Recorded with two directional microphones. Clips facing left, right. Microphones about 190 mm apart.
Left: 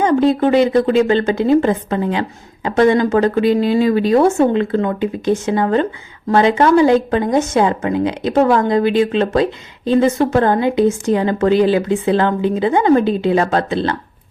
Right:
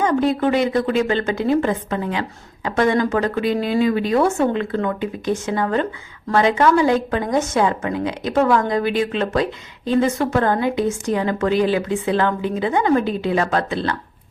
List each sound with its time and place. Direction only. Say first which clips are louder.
0.0 s a woman's voice: left 4 dB; 25° left (ahead or behind)